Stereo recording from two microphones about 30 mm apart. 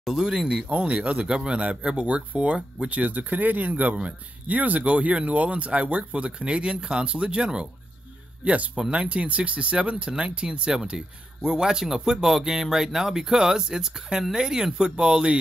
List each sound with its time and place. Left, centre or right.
0.0 s speech: centre
0.7 s speech: right
1.1 s speech: right
2.0 s speech: right
3.0 s speech: right
4.5 s speech: right
8.4 s speech: right
8.9 s speech: right